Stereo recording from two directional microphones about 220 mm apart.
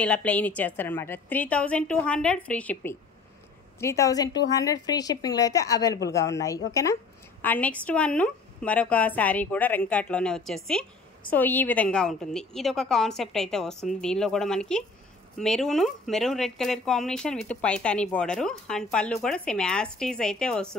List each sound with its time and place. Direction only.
0.0 s a woman's voice: 5° left (ahead or behind)